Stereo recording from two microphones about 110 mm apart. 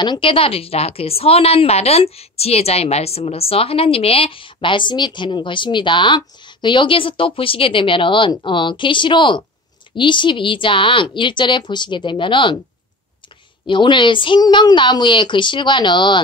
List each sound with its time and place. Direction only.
0.0 s a woman's voice: 50° left (ahead or behind)
13.7 s a woman's voice: 45° left (ahead or behind)